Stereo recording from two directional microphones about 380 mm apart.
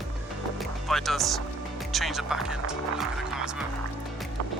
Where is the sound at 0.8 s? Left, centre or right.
Centre.